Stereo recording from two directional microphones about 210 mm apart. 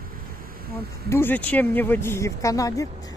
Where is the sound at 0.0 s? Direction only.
45° right (ahead or behind).